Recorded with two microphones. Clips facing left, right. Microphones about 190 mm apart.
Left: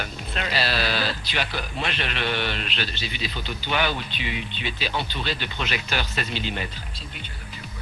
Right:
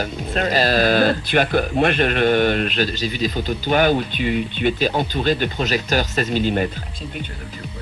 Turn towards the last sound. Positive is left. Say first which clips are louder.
# right 11 dB
turn(degrees=-45)  # may be behind; listen again after turning